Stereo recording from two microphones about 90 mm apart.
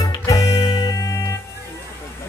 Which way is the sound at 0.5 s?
55° left (ahead or behind).